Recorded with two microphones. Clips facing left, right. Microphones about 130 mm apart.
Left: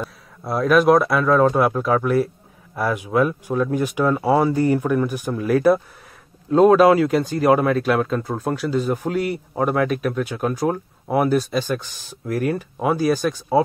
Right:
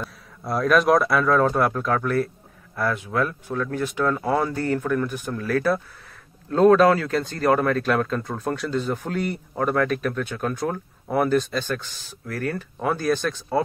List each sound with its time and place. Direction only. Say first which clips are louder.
0.0 s speech: left 3 dB; centre (ahead or behind)